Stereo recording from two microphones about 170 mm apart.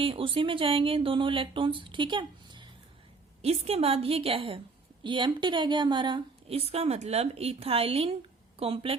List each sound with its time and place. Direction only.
0.0 s a woman's voice: 30° right (ahead or behind)
3.4 s a woman's voice: 35° right (ahead or behind)